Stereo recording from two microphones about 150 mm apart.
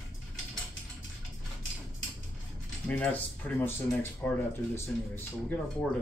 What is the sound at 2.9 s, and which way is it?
Speech, 10° left (ahead or behind).